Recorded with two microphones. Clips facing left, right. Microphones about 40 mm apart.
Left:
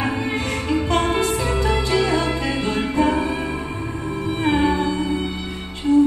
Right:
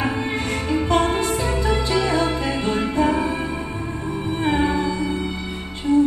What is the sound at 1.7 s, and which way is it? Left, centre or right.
Music, left.